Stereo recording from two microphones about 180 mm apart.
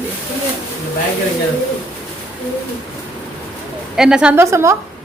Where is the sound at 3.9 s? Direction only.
5° right (ahead or behind).